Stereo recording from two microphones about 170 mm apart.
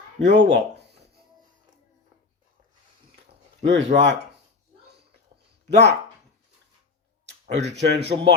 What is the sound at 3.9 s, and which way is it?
Speech, 50° right (ahead or behind).